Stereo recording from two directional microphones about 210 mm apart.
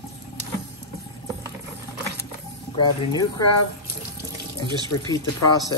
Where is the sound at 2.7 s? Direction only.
20° left (ahead or behind).